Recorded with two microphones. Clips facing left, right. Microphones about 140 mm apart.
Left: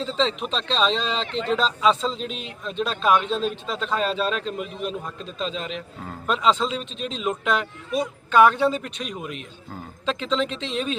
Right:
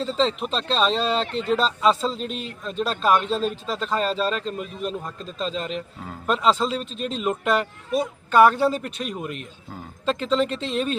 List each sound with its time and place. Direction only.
0.0 s a man's voice: 5° right (ahead or behind)
1.3 s speech: 45° right (ahead or behind)
1.5 s a man's voice: 5° right (ahead or behind)
6.9 s speech: 45° right (ahead or behind)
7.2 s a man's voice: 5° right (ahead or behind)
10.5 s speech: 45° right (ahead or behind)